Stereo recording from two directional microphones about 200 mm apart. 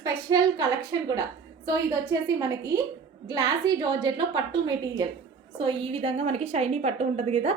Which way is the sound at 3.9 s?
20° right (ahead or behind).